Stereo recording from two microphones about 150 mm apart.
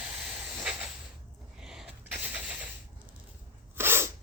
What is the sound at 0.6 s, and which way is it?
Hiss, 5° right (ahead or behind).